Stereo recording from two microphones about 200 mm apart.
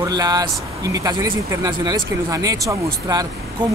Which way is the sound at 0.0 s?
20° right (ahead or behind).